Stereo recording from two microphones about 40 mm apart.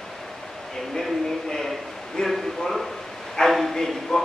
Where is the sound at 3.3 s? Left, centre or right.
Centre.